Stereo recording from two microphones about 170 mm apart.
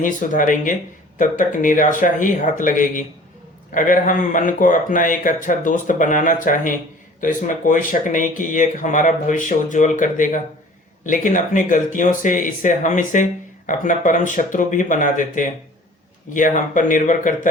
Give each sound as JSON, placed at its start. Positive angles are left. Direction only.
{"t": 0.0, "sound": "speech", "side_deg": 50}